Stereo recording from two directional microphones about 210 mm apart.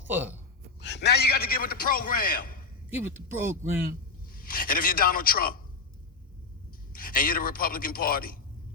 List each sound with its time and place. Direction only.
0.1 s speech: 10° right (ahead or behind)
0.8 s a man's voice: 55° left (ahead or behind)
3.0 s speech: 10° right (ahead or behind)
4.3 s a man's voice: 45° left (ahead or behind)
6.9 s a man's voice: 40° left (ahead or behind)